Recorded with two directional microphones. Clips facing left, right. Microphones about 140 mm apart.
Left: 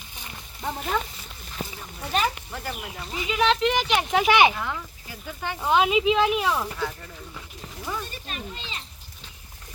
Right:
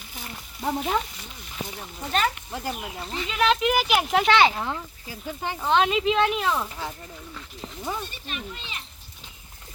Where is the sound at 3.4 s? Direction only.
5° right (ahead or behind).